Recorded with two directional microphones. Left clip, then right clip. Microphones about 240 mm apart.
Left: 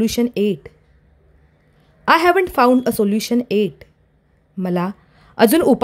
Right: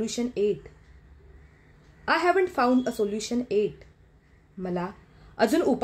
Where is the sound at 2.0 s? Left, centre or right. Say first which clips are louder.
Left 9 dB; left.